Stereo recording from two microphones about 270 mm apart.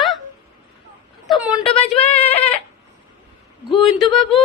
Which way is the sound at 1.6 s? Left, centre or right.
Left.